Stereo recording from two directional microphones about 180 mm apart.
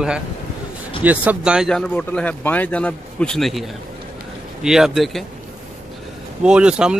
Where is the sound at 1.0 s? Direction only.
10° right (ahead or behind).